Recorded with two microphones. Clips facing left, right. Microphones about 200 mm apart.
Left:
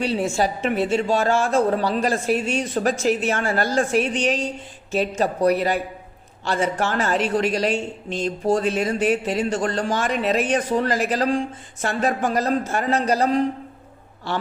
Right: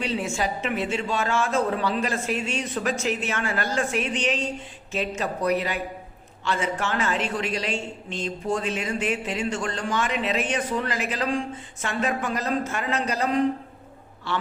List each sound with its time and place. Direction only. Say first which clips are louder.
0.0 s a woman's voice: left 5 dB; 35° left (ahead or behind)